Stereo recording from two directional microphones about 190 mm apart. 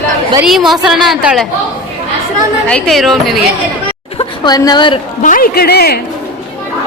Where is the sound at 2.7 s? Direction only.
Centre (ahead or behind).